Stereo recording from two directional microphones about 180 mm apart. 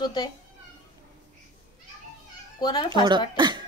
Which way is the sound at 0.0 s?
25° left (ahead or behind).